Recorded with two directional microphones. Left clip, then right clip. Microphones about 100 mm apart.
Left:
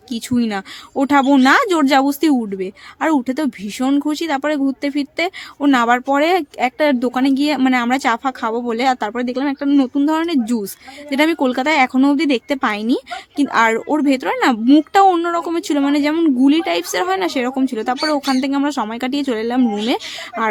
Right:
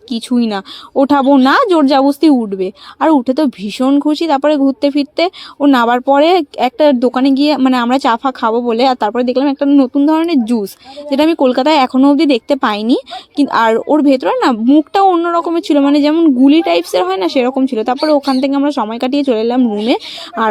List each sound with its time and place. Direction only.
0.1 s a woman's voice: 30° right (ahead or behind)
2.6 s speech: 35° right (ahead or behind)
3.1 s speech: 20° right (ahead or behind)
3.6 s speech: 35° right (ahead or behind)
3.8 s speech: 20° right (ahead or behind)
9.6 s a woman's voice: 20° right (ahead or behind)
10.2 s speech: 30° right (ahead or behind)
15.1 s a woman's voice: 10° right (ahead or behind)
15.4 s speech: 20° right (ahead or behind)
16.1 s speech: 15° right (ahead or behind)